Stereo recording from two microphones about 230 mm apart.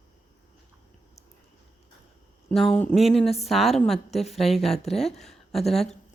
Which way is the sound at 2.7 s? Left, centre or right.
Centre.